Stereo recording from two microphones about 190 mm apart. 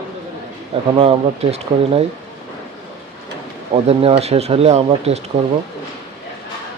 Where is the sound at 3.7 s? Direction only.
30° right (ahead or behind).